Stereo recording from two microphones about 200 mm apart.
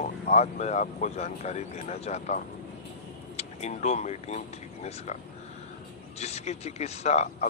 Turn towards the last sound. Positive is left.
turn(degrees=35)  # may be behind; listen again after turning